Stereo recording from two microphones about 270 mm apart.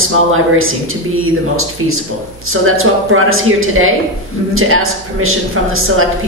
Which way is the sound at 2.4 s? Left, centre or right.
Right.